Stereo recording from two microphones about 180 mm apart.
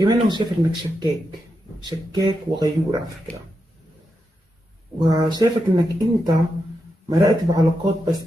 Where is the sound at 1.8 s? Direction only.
20° right (ahead or behind).